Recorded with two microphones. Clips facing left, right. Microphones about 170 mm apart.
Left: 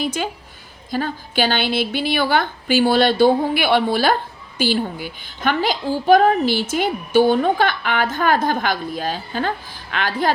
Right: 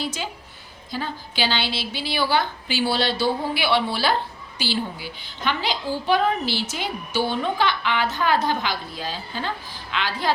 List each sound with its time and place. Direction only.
0.0 s a woman's voice: 55° left (ahead or behind)